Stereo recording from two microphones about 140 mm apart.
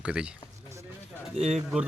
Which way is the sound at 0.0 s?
5° right (ahead or behind).